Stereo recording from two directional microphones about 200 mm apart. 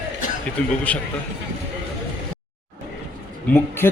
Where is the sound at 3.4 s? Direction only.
10° left (ahead or behind).